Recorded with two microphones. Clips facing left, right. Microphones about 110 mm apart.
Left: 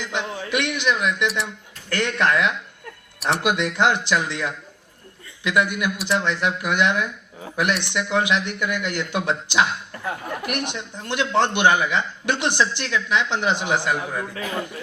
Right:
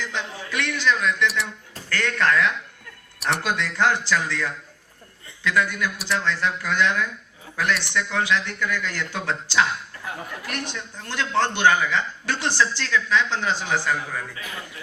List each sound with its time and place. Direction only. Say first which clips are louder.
0.0 s a man's voice: left 3 dB; 20° left (ahead or behind)
3.2 s speech: left 2 dB; centre (ahead or behind)
3.4 s a man's voice: left 3 dB; 20° left (ahead or behind)